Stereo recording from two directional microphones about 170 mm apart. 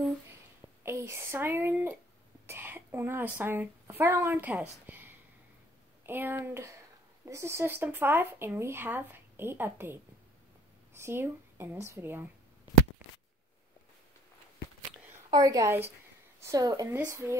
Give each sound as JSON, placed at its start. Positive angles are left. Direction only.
{"t": 0.8, "sound": "speech", "side_deg": -15}
{"t": 15.3, "sound": "a woman's voice", "side_deg": -20}